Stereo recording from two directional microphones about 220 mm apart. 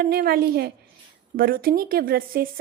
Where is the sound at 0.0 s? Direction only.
45° right (ahead or behind).